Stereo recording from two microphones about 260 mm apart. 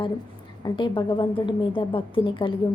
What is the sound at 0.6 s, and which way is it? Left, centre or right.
A woman's voice, centre.